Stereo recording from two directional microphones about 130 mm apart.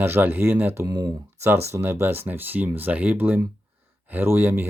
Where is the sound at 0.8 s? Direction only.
30° right (ahead or behind).